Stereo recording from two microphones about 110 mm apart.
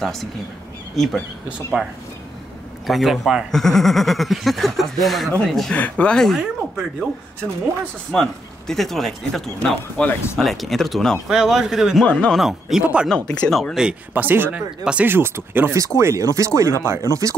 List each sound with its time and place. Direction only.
0.0 s speech: 5° left (ahead or behind)
8.1 s speech: 5° left (ahead or behind)
12.1 s speech: 10° left (ahead or behind)
12.4 s speech: 5° right (ahead or behind)
13.1 s speech: 5° left (ahead or behind)
14.1 s speech: 20° right (ahead or behind)